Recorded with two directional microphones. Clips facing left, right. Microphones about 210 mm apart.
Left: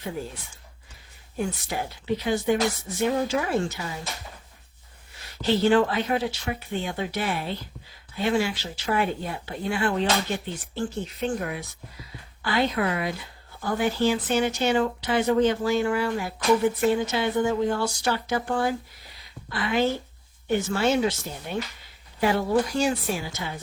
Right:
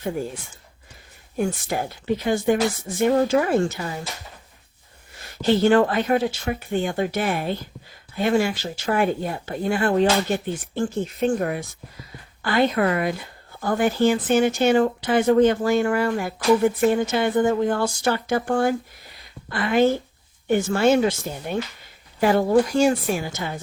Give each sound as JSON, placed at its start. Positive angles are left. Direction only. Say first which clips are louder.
{"t": 1.4, "sound": "speech", "louder": "right 5 dB", "side_deg": -50}
{"t": 5.4, "sound": "speech", "louder": "right 3 dB", "side_deg": -50}